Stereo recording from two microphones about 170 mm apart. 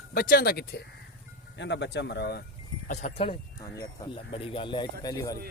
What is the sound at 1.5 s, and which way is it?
Speech, 90° left.